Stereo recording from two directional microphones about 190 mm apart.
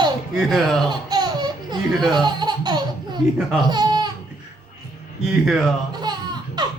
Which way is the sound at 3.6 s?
20° right (ahead or behind).